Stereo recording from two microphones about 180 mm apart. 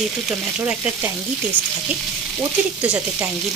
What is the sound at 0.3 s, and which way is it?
Speech, 5° right (ahead or behind).